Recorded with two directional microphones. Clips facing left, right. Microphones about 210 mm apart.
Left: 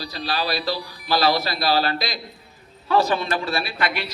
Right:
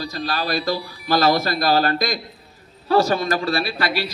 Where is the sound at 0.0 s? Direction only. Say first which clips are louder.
Right 1 dB; 45° right (ahead or behind).